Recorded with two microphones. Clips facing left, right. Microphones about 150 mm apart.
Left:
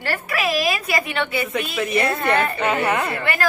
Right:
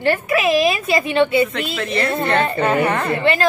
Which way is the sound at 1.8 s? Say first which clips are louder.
Left 1 dB; 10° left (ahead or behind).